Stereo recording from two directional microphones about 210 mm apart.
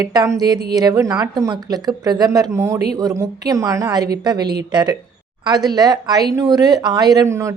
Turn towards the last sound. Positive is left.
turn(degrees=-15)  # may be behind; listen again after turning